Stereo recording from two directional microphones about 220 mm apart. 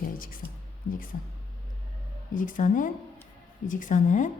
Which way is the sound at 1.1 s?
35° left (ahead or behind).